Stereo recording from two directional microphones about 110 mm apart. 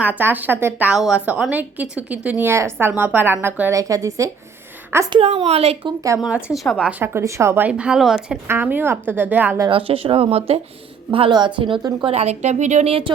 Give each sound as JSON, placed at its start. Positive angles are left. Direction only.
{"t": 0.0, "sound": "a woman's voice", "side_deg": -15}
{"t": 0.9, "sound": "a woman's voice", "side_deg": -5}
{"t": 5.2, "sound": "speech", "side_deg": -65}
{"t": 6.1, "sound": "speech", "side_deg": -5}
{"t": 7.0, "sound": "speech", "side_deg": -20}
{"t": 7.7, "sound": "a woman's voice", "side_deg": -10}
{"t": 8.4, "sound": "a woman's voice", "side_deg": -20}
{"t": 9.6, "sound": "speech", "side_deg": -55}
{"t": 11.3, "sound": "speech", "side_deg": -45}
{"t": 12.0, "sound": "a woman's voice", "side_deg": -80}